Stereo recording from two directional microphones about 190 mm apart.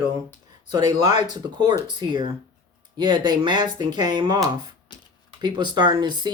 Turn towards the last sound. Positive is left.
turn(degrees=-25)  # may be behind; listen again after turning